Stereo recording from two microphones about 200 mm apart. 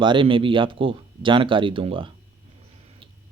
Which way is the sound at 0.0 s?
25° right (ahead or behind).